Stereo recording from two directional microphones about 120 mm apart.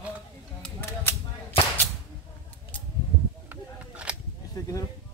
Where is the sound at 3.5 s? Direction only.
10° right (ahead or behind).